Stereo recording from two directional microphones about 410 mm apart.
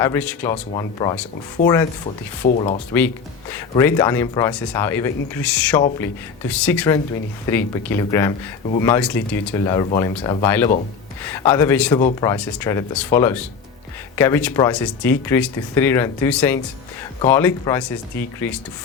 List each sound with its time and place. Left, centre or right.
0.0 s speech: centre
2.4 s speech: centre
3.5 s speech: centre